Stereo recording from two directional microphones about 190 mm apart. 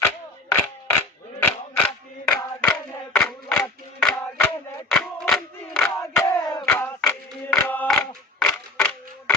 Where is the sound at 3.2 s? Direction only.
10° left (ahead or behind).